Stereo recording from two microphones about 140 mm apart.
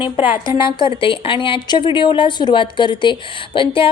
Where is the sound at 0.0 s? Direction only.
35° left (ahead or behind).